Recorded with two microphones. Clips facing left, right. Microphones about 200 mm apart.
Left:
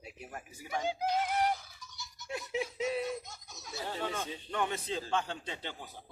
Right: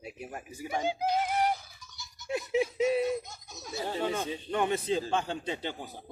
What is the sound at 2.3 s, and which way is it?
A man's voice, 15° right (ahead or behind).